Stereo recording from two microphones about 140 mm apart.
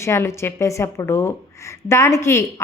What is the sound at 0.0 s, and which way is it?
Speech, 20° left (ahead or behind).